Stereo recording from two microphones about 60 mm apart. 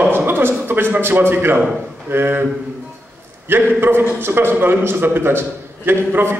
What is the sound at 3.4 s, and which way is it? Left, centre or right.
A man's voice, right.